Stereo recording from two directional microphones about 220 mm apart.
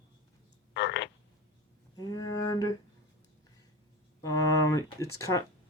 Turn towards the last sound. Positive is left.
turn(degrees=15)  # may be behind; listen again after turning